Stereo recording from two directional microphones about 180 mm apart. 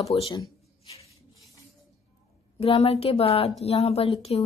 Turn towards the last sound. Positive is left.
turn(degrees=30)  # may be behind; listen again after turning